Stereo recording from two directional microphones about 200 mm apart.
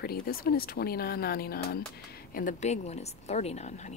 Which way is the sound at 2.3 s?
40° left (ahead or behind).